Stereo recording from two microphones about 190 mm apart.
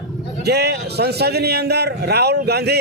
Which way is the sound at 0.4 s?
60° right (ahead or behind).